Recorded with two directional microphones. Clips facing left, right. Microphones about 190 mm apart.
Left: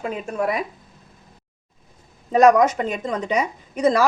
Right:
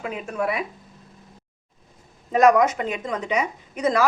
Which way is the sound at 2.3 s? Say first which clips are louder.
Left 2 dB; 35° left (ahead or behind).